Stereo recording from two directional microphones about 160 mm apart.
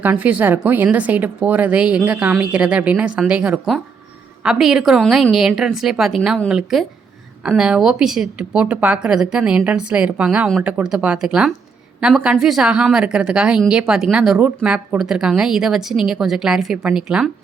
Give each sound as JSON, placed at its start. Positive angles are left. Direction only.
{"t": 0.0, "sound": "a woman's voice", "side_deg": -10}